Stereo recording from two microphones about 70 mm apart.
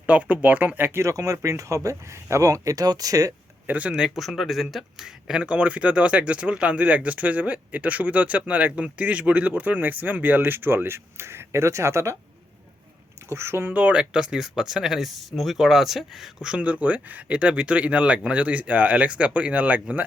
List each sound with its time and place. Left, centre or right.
0.0 s speech: centre
1.0 s speech: right
3.7 s speech: right
3.9 s speech: centre; by 12.1 s right
13.2 s speech: right
13.7 s speech: centre